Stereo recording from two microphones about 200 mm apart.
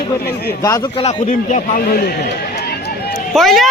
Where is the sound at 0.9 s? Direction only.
30° left (ahead or behind); by 2.9 s 55° left (ahead or behind).